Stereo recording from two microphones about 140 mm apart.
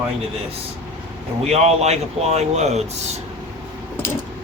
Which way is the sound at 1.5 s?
50° right (ahead or behind).